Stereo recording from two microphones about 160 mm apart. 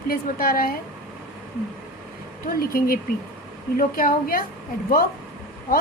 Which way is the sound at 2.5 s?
65° left (ahead or behind).